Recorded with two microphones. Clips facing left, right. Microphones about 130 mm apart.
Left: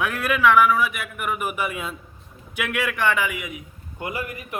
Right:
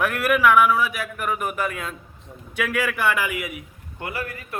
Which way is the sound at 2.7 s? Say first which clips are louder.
Left 1 dB; centre (ahead or behind).